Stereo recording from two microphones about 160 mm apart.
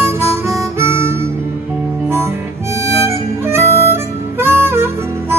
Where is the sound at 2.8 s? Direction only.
15° right (ahead or behind).